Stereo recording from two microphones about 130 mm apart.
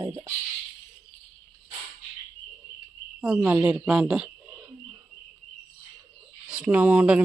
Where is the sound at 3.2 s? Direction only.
5° right (ahead or behind).